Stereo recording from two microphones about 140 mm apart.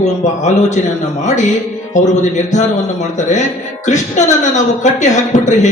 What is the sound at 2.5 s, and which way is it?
A man's voice, 60° left (ahead or behind).